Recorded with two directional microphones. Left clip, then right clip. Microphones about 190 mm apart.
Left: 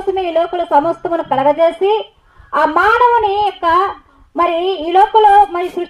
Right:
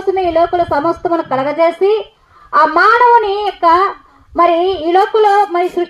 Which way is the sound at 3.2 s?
30° right (ahead or behind).